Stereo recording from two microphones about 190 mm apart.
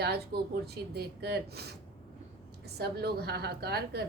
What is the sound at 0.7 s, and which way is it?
Speech, 60° right (ahead or behind).